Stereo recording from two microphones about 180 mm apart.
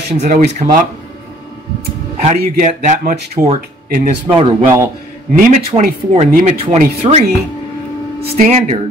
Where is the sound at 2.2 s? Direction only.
40° right (ahead or behind).